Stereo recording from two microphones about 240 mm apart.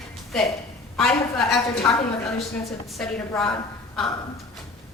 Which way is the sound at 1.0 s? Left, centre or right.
Centre.